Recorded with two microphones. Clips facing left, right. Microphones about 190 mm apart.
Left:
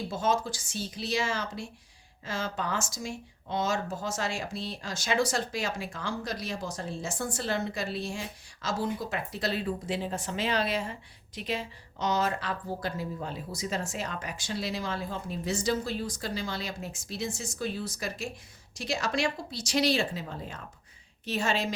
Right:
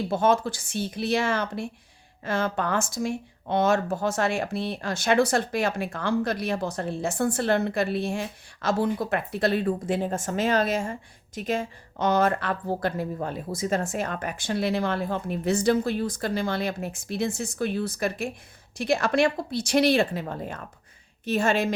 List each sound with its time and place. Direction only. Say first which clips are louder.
0.1 s a woman's voice: right 6 dB; 60° right (ahead or behind)